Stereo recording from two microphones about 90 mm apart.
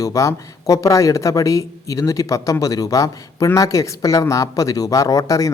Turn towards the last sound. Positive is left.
turn(degrees=40)  # may be behind; listen again after turning